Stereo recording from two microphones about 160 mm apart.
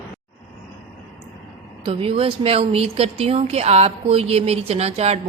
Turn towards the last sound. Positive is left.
turn(degrees=-40)  # may be behind; listen again after turning